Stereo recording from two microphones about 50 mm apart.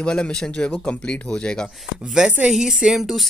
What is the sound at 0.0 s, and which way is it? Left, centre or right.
Speech, left.